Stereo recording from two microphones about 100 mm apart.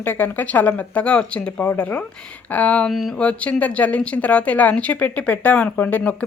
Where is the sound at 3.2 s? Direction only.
15° left (ahead or behind).